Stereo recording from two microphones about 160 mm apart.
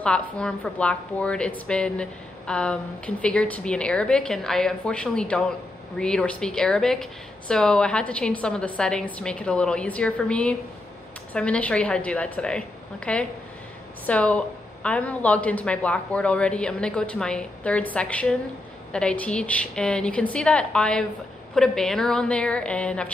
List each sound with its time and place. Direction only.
0.0 s a woman's voice: 5° left (ahead or behind)